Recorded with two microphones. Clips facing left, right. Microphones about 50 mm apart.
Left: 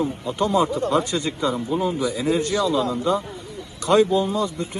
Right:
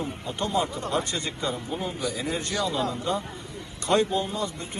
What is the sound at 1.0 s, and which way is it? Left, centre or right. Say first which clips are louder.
Speech: left 6 dB; right.